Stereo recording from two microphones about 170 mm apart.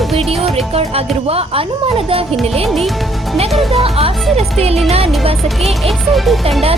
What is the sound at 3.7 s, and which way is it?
Speech, 35° right (ahead or behind).